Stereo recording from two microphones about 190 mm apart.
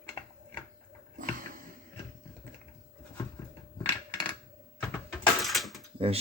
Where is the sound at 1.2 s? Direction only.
45° right (ahead or behind).